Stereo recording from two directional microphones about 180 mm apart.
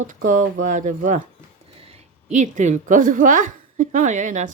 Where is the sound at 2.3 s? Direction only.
40° right (ahead or behind).